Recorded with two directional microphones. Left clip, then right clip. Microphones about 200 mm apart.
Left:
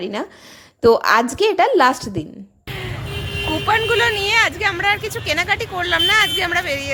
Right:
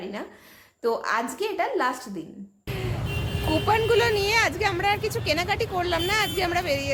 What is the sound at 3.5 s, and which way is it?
Speech, centre (ahead or behind).